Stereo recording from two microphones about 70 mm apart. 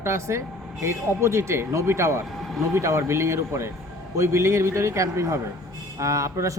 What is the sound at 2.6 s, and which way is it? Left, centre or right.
A man's voice, right.